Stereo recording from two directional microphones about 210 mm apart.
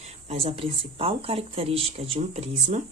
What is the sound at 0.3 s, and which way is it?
Speech, 30° right (ahead or behind).